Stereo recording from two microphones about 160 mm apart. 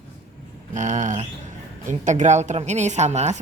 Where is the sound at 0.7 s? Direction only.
50° right (ahead or behind).